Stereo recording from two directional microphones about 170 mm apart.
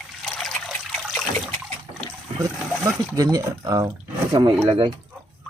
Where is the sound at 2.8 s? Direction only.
20° right (ahead or behind).